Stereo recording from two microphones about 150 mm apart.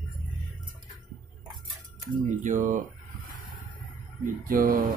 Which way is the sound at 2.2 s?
55° right (ahead or behind).